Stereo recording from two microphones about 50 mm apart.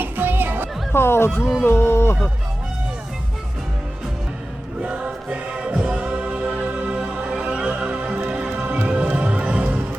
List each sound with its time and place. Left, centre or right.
0.0 s music: right
0.9 s speech: left
4.8 s music: right